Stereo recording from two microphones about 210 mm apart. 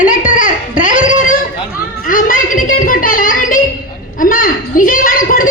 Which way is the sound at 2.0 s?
40° left (ahead or behind).